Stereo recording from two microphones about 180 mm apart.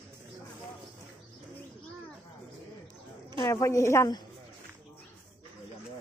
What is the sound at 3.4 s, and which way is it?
Speech, 15° left (ahead or behind).